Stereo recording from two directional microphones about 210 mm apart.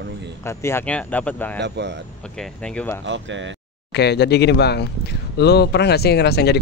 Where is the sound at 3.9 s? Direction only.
50° left (ahead or behind).